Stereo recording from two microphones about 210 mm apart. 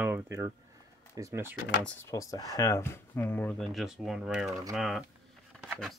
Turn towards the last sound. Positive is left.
turn(degrees=0)  # may be behind; listen again after turning